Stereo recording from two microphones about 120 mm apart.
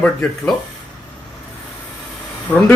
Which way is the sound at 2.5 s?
15° left (ahead or behind).